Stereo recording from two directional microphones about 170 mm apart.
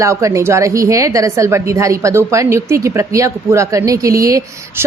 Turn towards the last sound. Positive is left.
turn(degrees=-20)  # may be behind; listen again after turning